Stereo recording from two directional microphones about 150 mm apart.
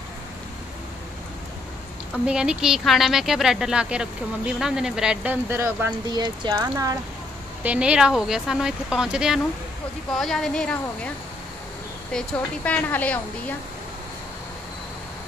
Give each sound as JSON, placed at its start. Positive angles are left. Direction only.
{"t": 2.2, "sound": "speech", "side_deg": -5}
{"t": 6.0, "sound": "speech", "side_deg": -30}
{"t": 7.6, "sound": "speech", "side_deg": -10}
{"t": 12.1, "sound": "a woman's voice", "side_deg": 5}